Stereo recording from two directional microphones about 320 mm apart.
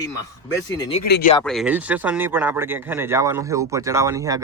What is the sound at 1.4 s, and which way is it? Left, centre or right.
Speech, centre.